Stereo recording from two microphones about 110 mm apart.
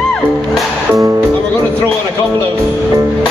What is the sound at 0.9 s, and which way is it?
Speech, 30° right (ahead or behind).